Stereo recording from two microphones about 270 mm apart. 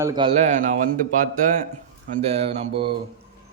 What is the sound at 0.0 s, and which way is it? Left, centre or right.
A man's voice, centre.